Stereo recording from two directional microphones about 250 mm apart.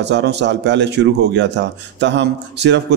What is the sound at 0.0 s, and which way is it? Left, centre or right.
Speech, right.